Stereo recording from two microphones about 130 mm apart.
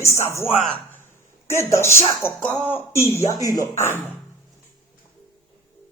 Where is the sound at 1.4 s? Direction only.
20° left (ahead or behind).